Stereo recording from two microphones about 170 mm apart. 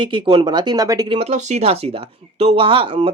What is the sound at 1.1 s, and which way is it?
Speech, 40° right (ahead or behind).